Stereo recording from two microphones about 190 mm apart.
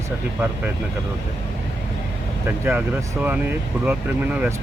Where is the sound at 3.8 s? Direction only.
5° right (ahead or behind).